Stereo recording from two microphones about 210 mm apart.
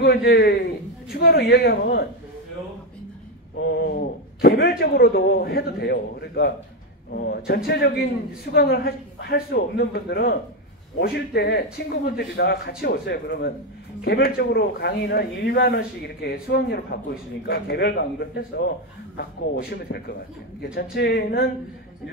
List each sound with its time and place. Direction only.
0.0 s speech: 50° left (ahead or behind)
3.7 s speech: 50° left (ahead or behind)